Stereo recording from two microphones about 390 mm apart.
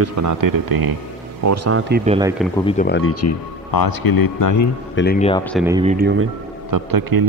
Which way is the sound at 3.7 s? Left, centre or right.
Left.